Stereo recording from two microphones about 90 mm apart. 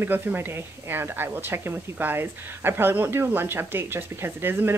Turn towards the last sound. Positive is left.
turn(degrees=-25)  # may be behind; listen again after turning